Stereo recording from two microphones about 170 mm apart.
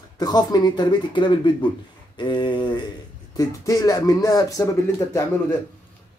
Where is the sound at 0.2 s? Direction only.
25° left (ahead or behind).